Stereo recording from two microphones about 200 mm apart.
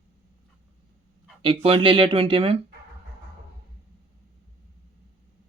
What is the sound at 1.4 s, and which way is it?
Speech, 25° right (ahead or behind).